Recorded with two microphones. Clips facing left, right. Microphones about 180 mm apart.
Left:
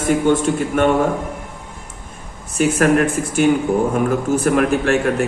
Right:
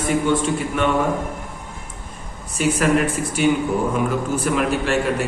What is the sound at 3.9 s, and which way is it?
A man's voice, 50° left (ahead or behind).